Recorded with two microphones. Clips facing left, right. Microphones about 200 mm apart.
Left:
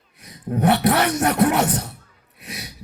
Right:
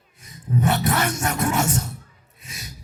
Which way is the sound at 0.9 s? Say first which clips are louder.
Left 5 dB; 50° right (ahead or behind).